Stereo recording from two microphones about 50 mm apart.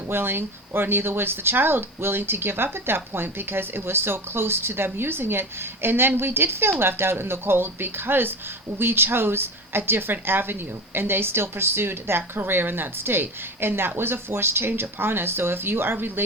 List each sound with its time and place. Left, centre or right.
0.1 s a woman's voice: right